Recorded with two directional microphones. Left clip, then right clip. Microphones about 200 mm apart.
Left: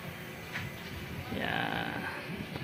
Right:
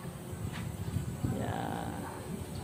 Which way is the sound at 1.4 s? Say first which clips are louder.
Left 6 dB; 15° right (ahead or behind).